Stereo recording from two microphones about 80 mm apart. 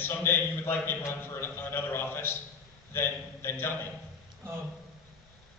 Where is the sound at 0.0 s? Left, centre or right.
Left.